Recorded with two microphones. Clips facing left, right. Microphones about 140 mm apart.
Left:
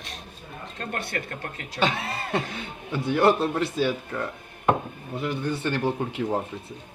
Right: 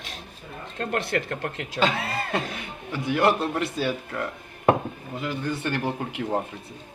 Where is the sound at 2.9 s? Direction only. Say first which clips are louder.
Left 1 dB; 25° left (ahead or behind).